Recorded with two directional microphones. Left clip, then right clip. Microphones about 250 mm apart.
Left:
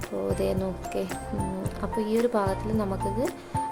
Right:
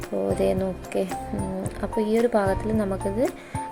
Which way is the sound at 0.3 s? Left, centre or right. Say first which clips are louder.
Right 4 dB; centre.